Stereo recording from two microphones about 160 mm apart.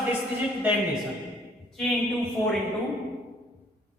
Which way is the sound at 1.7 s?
Centre (ahead or behind).